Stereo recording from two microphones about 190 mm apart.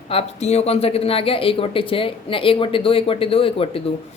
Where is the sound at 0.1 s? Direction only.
35° left (ahead or behind).